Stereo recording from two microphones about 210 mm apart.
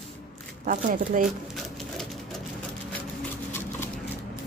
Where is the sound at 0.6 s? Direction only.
40° right (ahead or behind).